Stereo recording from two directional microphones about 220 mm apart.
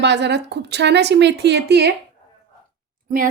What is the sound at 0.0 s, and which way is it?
Speech, 50° right (ahead or behind).